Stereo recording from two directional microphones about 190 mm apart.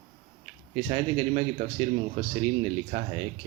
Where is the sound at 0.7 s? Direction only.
35° right (ahead or behind).